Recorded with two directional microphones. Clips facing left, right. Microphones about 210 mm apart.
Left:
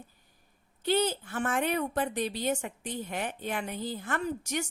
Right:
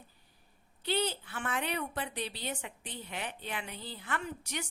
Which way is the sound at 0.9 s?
45° left (ahead or behind).